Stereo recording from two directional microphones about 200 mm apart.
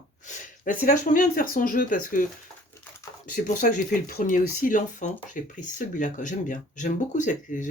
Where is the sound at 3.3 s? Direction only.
40° left (ahead or behind).